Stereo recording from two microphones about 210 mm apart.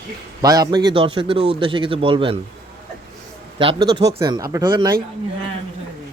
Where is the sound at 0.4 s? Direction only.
15° right (ahead or behind).